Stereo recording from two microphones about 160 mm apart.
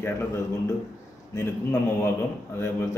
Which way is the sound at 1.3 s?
15° left (ahead or behind).